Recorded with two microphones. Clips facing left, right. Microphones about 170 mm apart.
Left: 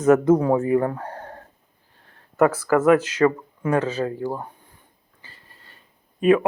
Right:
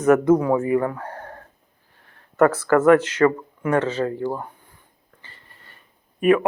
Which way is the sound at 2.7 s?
15° left (ahead or behind).